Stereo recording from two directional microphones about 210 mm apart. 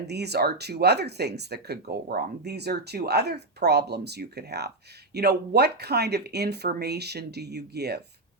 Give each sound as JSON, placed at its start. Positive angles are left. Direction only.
{"t": 0.1, "sound": "speech", "side_deg": -50}